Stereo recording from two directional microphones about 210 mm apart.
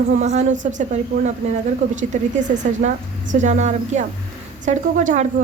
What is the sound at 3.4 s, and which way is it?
A woman's voice, 35° right (ahead or behind).